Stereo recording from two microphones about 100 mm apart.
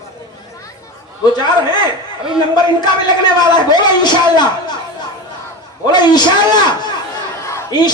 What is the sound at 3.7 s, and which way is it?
Speech, 45° left (ahead or behind).